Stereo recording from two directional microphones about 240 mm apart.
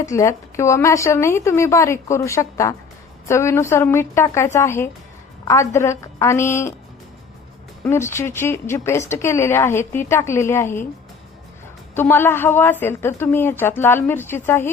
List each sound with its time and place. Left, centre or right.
0.0 s speech: centre
7.9 s speech: centre
11.9 s speech: centre